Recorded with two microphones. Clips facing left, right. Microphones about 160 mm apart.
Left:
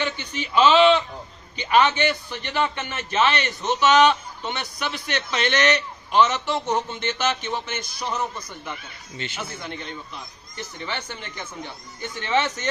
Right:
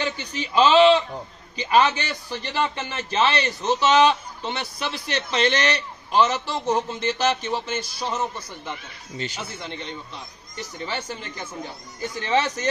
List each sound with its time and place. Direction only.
0.0 s a man's voice: 35° right (ahead or behind)